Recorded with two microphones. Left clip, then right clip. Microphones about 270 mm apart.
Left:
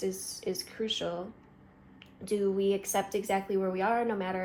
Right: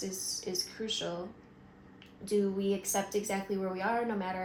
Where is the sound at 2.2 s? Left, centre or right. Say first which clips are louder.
Left 3 dB; left.